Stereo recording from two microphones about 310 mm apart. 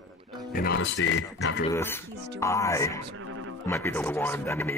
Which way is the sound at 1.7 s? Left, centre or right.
Centre.